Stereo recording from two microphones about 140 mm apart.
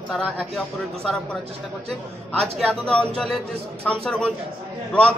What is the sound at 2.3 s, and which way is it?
A man's voice, 5° left (ahead or behind).